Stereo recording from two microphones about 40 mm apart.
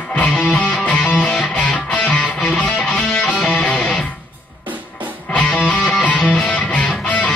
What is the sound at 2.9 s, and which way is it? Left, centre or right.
Music, left.